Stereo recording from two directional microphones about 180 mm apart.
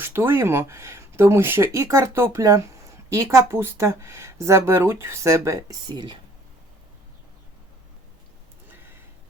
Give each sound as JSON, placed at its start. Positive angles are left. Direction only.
{"t": 0.0, "sound": "speech", "side_deg": -15}